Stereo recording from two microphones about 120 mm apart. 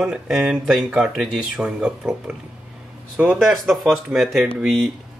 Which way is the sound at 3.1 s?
10° right (ahead or behind).